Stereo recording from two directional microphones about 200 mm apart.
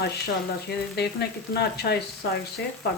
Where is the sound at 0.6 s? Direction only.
55° left (ahead or behind).